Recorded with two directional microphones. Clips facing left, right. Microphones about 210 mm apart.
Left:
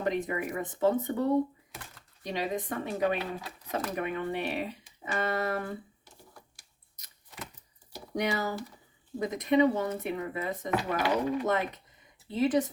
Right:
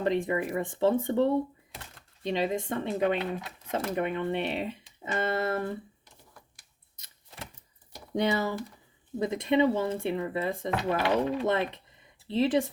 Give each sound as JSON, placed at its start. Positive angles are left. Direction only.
{"t": 0.0, "sound": "speech", "side_deg": -30}
{"t": 5.0, "sound": "music", "side_deg": -25}
{"t": 6.9, "sound": "a sound", "side_deg": -25}
{"t": 8.1, "sound": "speech", "side_deg": -25}